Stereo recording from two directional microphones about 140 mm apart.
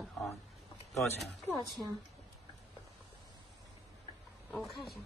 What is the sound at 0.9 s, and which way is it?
Speech, centre (ahead or behind).